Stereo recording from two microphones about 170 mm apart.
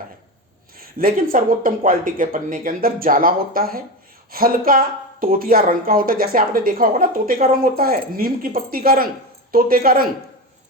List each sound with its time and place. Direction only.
0.8 s speech: 60° right (ahead or behind)